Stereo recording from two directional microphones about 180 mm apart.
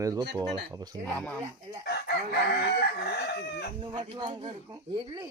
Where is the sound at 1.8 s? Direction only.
65° left (ahead or behind).